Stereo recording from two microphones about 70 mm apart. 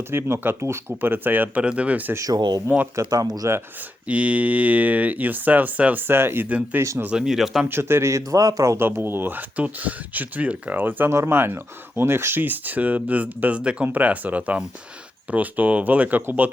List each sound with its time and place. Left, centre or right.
0.1 s a man's voice: right
2.1 s speech: right
3.4 s speech: right
4.0 s speech: right
7.1 s speech: centre
7.7 s a man's voice: right
8.3 s speech: right
8.8 s speech: right